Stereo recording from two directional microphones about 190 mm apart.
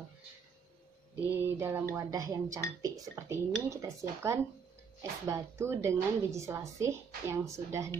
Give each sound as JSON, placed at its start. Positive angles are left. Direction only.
{"t": 1.2, "sound": "a woman's voice", "side_deg": -10}